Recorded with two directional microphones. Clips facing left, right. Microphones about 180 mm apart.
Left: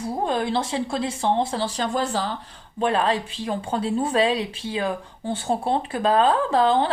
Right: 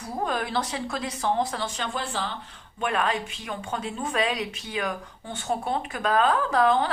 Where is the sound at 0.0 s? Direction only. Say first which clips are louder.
Left 5 dB; 30° left (ahead or behind).